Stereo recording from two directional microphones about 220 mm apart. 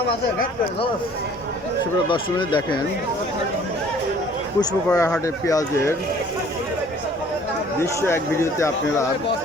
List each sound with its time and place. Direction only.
2.0 s speech: 20° left (ahead or behind)
4.9 s speech: 15° left (ahead or behind)
7.8 s speech: 10° left (ahead or behind)